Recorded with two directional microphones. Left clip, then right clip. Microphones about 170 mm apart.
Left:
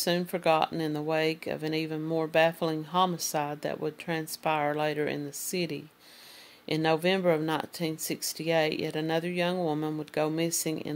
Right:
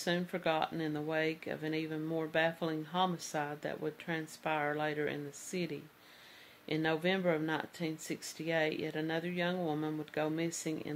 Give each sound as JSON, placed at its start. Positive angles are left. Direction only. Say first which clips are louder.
{"t": 0.0, "sound": "speech", "louder": "left 7 dB", "side_deg": 35}